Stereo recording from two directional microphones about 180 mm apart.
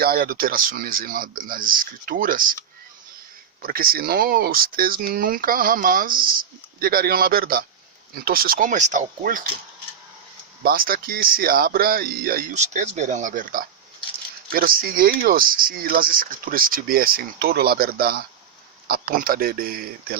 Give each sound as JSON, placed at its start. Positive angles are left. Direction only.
{"t": 0.0, "sound": "speech", "side_deg": -55}
{"t": 3.6, "sound": "speech", "side_deg": -55}
{"t": 10.6, "sound": "speech", "side_deg": -55}
{"t": 12.5, "sound": "speech", "side_deg": -40}